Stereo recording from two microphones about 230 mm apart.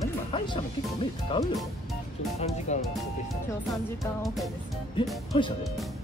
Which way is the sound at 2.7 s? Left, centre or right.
Left.